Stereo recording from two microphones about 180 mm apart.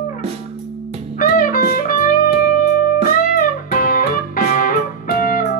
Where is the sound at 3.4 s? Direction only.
55° left (ahead or behind).